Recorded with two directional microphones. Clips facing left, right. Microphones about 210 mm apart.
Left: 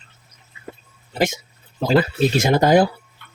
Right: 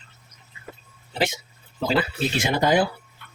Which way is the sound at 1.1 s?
45° left (ahead or behind).